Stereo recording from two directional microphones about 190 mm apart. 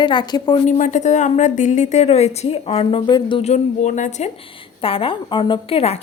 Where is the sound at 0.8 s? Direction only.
40° left (ahead or behind).